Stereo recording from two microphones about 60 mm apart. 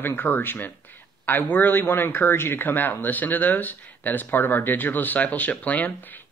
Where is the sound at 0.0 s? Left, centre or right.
Left.